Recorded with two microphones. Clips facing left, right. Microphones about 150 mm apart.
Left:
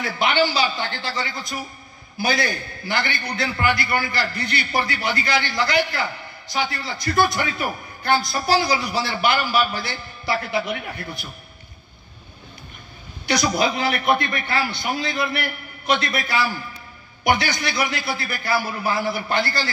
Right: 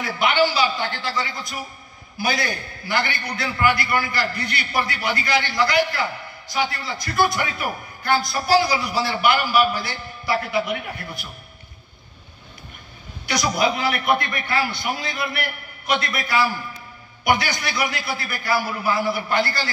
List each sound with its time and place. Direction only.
0.0 s a man's voice: 25° left (ahead or behind)
2.4 s a man's voice: 25° left (ahead or behind)
13.3 s a man's voice: 25° left (ahead or behind)